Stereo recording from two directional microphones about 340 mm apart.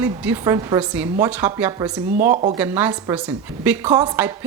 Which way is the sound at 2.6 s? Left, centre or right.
Centre.